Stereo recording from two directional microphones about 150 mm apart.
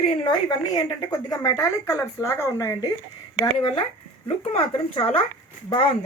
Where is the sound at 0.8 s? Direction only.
25° left (ahead or behind).